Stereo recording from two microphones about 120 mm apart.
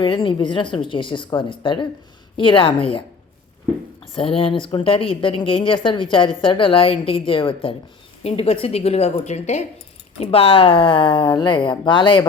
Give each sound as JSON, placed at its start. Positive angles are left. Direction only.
{"t": 0.0, "sound": "speech", "side_deg": 45}
{"t": 4.1, "sound": "a woman's voice", "side_deg": 50}
{"t": 10.2, "sound": "speech", "side_deg": 55}